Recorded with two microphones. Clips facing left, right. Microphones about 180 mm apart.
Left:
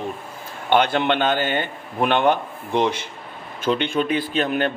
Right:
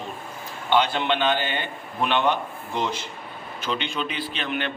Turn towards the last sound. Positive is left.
turn(degrees=45)  # may be behind; listen again after turning